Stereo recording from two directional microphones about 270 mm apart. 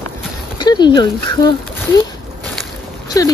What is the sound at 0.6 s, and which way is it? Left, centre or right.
Speech, centre.